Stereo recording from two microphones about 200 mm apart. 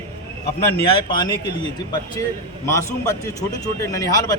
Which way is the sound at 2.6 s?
15° left (ahead or behind).